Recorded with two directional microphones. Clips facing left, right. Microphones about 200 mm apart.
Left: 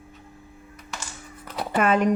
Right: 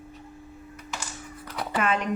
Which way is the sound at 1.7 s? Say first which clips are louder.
Left 6 dB; 45° left (ahead or behind).